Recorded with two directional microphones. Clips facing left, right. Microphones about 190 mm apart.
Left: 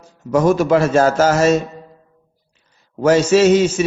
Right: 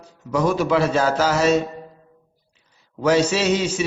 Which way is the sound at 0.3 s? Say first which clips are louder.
Left 6 dB; 45° left (ahead or behind).